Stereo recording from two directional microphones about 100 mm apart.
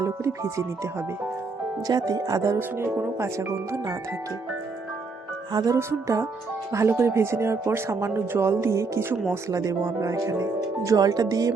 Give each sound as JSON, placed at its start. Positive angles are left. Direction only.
{"t": 0.0, "sound": "speech", "side_deg": -30}
{"t": 1.9, "sound": "speech", "side_deg": -40}
{"t": 5.5, "sound": "speech", "side_deg": -40}